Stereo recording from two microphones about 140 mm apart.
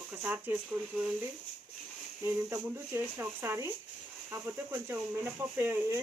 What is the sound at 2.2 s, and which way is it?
Speech, 15° right (ahead or behind).